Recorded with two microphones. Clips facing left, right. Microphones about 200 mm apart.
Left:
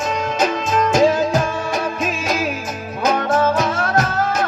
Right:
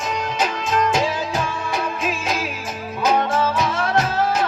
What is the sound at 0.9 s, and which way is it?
Music, 45° left (ahead or behind).